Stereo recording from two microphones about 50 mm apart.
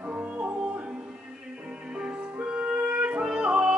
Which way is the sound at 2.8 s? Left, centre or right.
Right.